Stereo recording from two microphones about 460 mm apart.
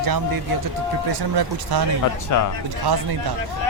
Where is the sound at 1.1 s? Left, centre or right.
Right.